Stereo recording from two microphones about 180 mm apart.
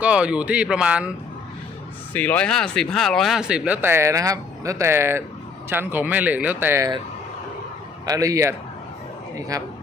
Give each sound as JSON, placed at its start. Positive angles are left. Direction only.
{"t": 0.0, "sound": "speech", "side_deg": -5}
{"t": 2.1, "sound": "speech", "side_deg": 10}
{"t": 8.0, "sound": "speech", "side_deg": -20}